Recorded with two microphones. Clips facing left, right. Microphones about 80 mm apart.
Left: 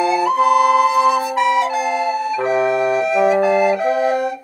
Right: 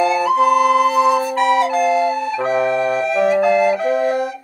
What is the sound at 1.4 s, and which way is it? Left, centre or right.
Flute, right.